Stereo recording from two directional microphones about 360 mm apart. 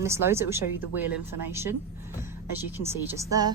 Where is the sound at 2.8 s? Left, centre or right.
Centre.